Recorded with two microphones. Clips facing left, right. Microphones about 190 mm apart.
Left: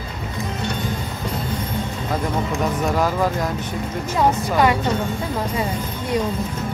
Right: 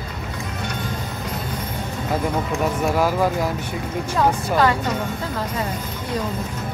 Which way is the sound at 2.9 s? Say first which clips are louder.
Right 2 dB; 10° right (ahead or behind).